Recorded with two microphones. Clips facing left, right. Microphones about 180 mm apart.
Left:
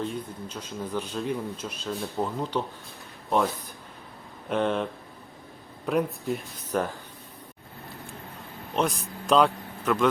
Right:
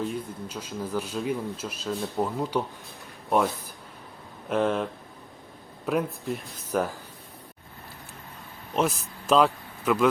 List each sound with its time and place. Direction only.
0.0 s speech: 5° right (ahead or behind)
8.7 s speech: 5° right (ahead or behind)